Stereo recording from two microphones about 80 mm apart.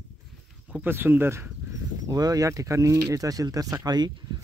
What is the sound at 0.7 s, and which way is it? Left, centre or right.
Speech, right.